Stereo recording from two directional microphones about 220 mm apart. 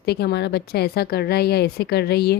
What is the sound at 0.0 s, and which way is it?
Speech, 45° left (ahead or behind).